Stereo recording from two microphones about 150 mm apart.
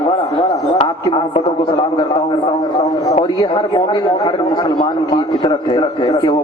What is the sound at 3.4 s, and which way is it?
Speech, 30° left (ahead or behind).